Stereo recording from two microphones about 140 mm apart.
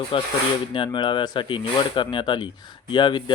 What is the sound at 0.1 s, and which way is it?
Speech, 40° left (ahead or behind).